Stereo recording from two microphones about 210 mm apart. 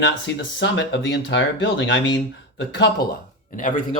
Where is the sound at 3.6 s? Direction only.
35° left (ahead or behind).